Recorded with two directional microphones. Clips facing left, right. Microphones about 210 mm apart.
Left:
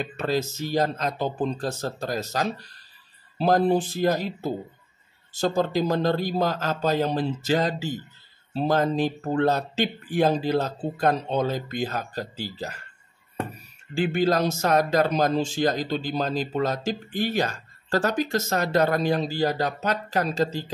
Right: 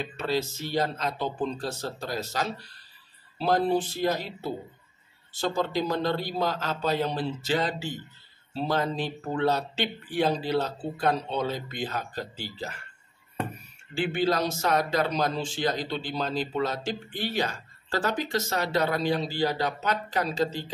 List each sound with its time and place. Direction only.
0.0 s speech: 45° left (ahead or behind)
13.9 s speech: 45° left (ahead or behind)